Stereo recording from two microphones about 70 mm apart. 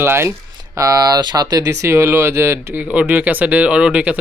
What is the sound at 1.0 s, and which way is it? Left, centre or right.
Speech, right.